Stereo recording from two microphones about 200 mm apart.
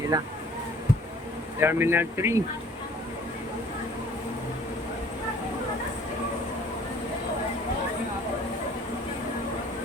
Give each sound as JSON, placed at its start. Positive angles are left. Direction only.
{"t": 0.1, "sound": "speech", "side_deg": -20}
{"t": 1.5, "sound": "speech", "side_deg": -10}